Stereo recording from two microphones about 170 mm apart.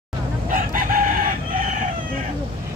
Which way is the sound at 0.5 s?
55° right (ahead or behind).